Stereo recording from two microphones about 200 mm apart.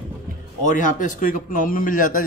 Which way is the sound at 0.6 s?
40° left (ahead or behind).